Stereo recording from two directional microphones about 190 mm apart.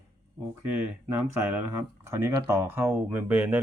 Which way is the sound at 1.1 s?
15° right (ahead or behind).